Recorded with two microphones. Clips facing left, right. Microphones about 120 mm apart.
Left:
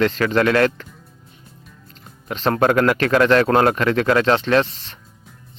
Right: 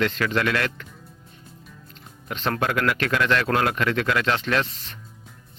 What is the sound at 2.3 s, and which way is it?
Speech, 35° left (ahead or behind).